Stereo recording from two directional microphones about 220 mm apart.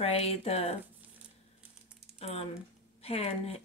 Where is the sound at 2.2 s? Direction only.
25° left (ahead or behind).